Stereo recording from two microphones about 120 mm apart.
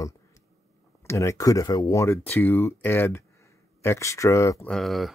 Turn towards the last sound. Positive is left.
turn(degrees=0)  # may be behind; listen again after turning